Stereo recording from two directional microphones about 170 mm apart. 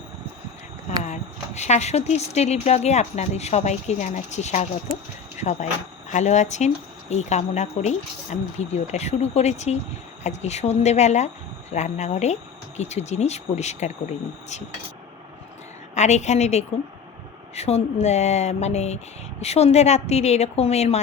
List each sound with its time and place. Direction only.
1.0 s speech: 45° left (ahead or behind)
16.0 s speech: 40° left (ahead or behind)